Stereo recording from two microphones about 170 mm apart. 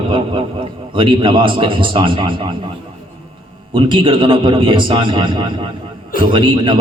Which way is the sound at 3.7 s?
30° right (ahead or behind).